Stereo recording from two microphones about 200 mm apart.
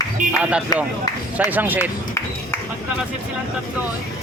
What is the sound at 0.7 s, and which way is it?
Speech, 20° left (ahead or behind).